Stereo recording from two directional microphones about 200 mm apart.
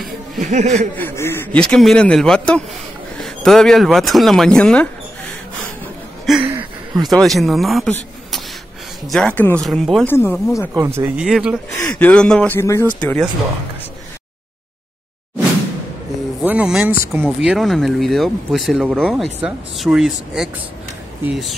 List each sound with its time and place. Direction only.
0.4 s speech: 35° right (ahead or behind)
0.9 s speech: 10° left (ahead or behind)
6.2 s a sound: centre (ahead or behind)
6.5 s a sound: 20° right (ahead or behind)
7.1 s speech: centre (ahead or behind)
10.7 s speech: 15° right (ahead or behind)
11.7 s speech: 15° left (ahead or behind)
16.4 s speech: 5° right (ahead or behind)